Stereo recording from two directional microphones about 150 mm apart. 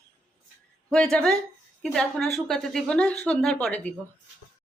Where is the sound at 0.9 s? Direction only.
5° left (ahead or behind).